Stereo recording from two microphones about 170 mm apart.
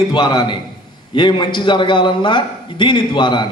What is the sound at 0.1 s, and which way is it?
A man's voice, 25° left (ahead or behind).